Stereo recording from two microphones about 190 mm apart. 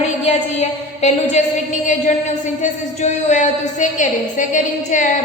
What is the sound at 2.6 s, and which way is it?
A woman's voice, 40° left (ahead or behind).